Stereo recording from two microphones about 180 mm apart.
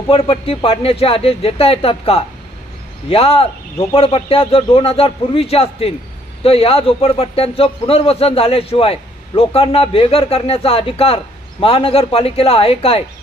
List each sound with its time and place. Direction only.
0.1 s a man's voice: 30° left (ahead or behind)